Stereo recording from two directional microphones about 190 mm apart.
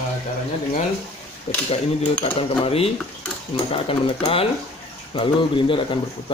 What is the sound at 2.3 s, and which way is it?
Speech, 30° left (ahead or behind).